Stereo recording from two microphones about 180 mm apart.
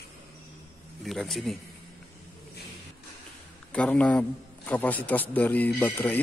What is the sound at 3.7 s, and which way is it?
Speech, 5° left (ahead or behind).